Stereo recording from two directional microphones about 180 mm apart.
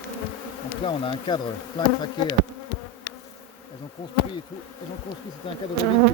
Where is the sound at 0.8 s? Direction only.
25° left (ahead or behind).